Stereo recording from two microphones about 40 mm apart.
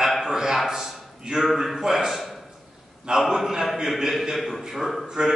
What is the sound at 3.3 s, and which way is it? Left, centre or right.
A man's voice, centre.